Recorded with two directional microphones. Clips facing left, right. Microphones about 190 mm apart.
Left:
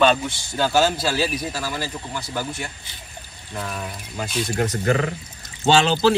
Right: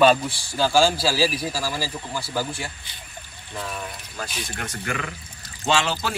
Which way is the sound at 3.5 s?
Centre (ahead or behind).